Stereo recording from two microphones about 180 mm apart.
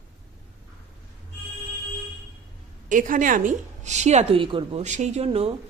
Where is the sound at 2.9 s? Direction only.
45° right (ahead or behind).